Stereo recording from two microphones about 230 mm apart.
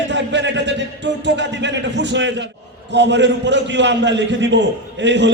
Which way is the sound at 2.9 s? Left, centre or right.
Right.